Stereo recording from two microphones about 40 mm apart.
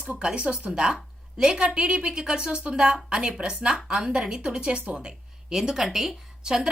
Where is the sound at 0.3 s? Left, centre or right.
Right.